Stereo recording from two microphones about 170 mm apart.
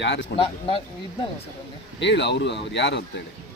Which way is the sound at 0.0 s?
90° left.